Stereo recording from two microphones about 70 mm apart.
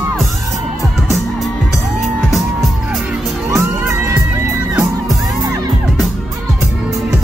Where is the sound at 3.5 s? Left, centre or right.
Right.